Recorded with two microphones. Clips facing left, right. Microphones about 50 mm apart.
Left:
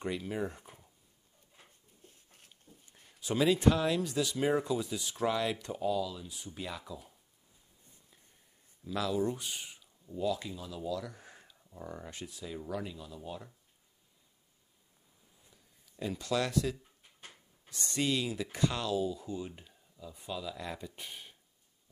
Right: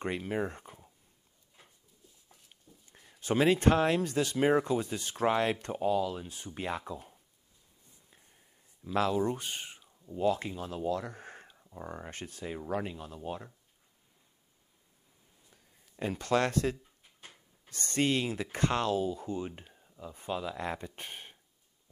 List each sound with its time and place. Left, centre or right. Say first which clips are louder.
0.0 s speech: right 2 dB; right
2.9 s speech: right 4 dB; right
8.9 s speech: right 3 dB; right
11.5 s a sound: right 5 dB; right
11.8 s speech: right 2 dB; right
15.5 s a sound: right 3 dB; right
17.6 s speech: right 3 dB; right